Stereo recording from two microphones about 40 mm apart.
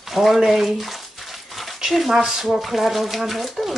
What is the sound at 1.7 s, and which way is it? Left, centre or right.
Speech, centre.